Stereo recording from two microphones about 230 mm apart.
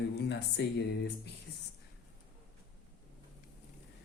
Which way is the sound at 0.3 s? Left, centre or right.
Left.